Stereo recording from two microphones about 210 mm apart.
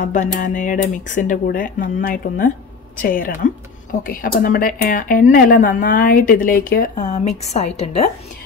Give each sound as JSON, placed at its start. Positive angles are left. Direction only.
{"t": 0.0, "sound": "speech", "side_deg": 35}